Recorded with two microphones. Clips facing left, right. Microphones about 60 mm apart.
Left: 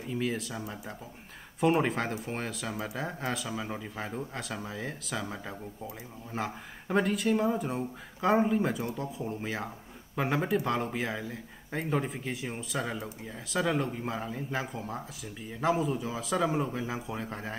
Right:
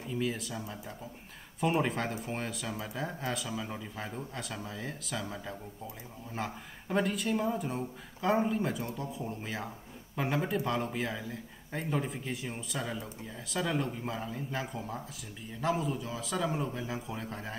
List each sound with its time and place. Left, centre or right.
0.2 s speech: centre
12.8 s speech: centre
13.5 s speech: centre